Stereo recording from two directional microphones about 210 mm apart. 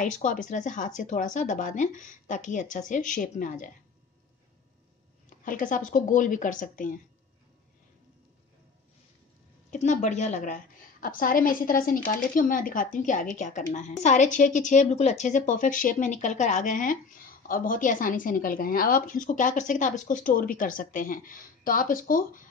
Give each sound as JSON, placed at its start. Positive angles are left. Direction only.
{"t": 0.0, "sound": "a woman's voice", "side_deg": 40}
{"t": 5.4, "sound": "a woman's voice", "side_deg": 40}
{"t": 9.7, "sound": "a woman's voice", "side_deg": 35}